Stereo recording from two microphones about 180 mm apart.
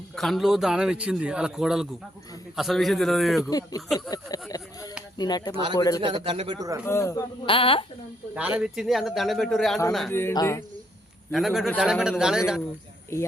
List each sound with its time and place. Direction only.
0.2 s a man's voice: centre (ahead or behind)
3.5 s a sound: 20° left (ahead or behind)
3.8 s a man's voice: centre (ahead or behind)
4.1 s a sound: 20° left (ahead or behind)
6.0 s speech: 25° right (ahead or behind)
6.8 s speech: 15° left (ahead or behind)
7.4 s a sound: 30° left (ahead or behind)
8.4 s a man's voice: 5° right (ahead or behind)
10.1 s speech: 15° left (ahead or behind)
11.3 s a man's voice: centre (ahead or behind)